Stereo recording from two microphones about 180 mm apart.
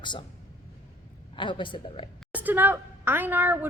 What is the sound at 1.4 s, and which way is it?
Speech, 25° left (ahead or behind).